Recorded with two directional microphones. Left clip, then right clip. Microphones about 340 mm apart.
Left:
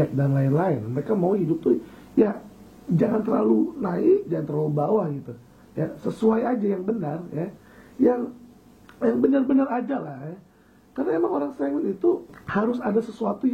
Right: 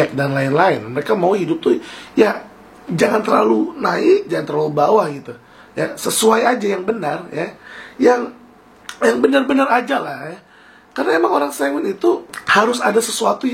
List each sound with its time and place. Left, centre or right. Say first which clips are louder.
0.0 s speech: right 8 dB; centre
4.5 s speech: right 8 dB; centre
5.8 s speech: right 9 dB; centre